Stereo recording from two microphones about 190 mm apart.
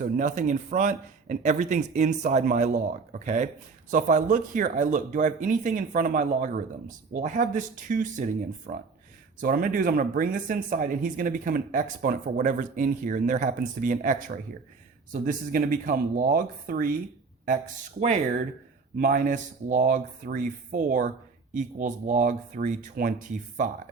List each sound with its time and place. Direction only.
0.0 s speech: 40° right (ahead or behind)
18.9 s speech: 45° right (ahead or behind)